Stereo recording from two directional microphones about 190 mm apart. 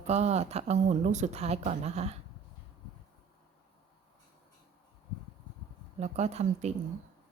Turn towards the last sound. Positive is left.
turn(degrees=-35)  # may be behind; listen again after turning